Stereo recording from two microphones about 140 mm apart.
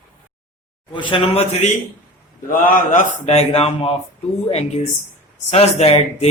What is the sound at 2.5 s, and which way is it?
A man's voice, 75° left (ahead or behind).